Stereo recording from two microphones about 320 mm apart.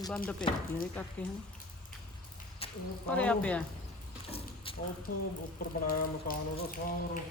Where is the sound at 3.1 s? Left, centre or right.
Centre.